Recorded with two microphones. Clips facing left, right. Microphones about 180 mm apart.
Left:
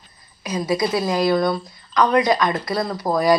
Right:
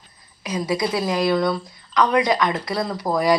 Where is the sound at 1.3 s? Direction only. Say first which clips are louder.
Left 1 dB; 10° left (ahead or behind).